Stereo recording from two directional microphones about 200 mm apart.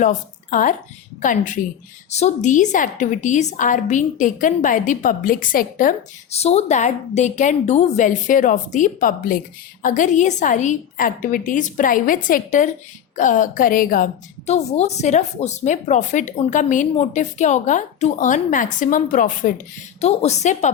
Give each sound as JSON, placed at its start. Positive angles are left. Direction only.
{"t": 0.0, "sound": "a woman's voice", "side_deg": 40}